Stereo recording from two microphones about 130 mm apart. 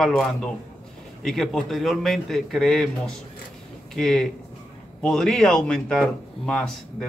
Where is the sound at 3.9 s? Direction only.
5° left (ahead or behind).